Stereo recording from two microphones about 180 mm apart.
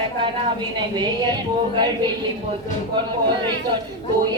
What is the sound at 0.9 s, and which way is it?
Speech, 25° right (ahead or behind).